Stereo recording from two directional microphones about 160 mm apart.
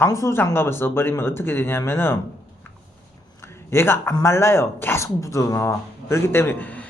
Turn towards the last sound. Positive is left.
turn(degrees=10)  # may be behind; listen again after turning